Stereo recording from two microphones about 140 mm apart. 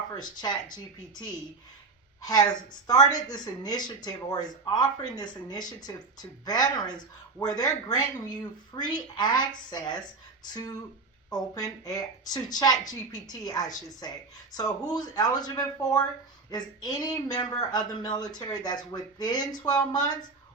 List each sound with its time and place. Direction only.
0.2 s speech: 30° left (ahead or behind)